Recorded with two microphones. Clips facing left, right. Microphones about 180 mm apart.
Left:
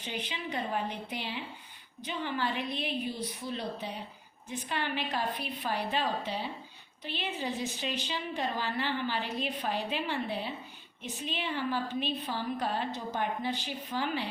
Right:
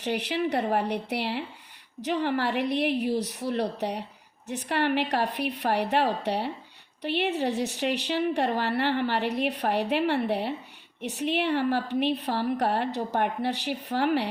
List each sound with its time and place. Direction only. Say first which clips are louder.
0.0 s a woman's voice: right 11 dB; 75° right (ahead or behind)